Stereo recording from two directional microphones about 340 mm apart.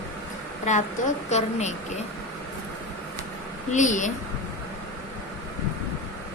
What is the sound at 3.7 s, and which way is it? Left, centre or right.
Speech, left.